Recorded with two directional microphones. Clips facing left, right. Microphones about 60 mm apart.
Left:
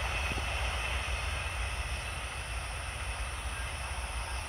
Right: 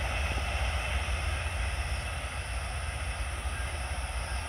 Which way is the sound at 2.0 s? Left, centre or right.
Centre.